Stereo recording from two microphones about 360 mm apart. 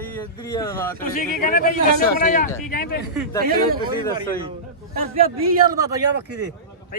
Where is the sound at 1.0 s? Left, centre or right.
Left.